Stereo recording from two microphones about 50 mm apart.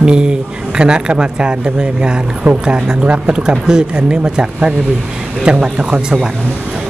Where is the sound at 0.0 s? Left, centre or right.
Centre.